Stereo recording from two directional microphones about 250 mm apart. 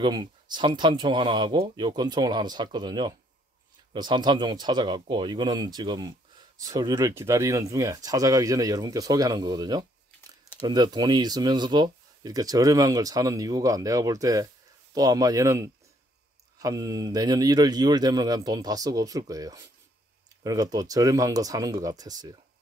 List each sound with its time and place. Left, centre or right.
0.0 s speech: centre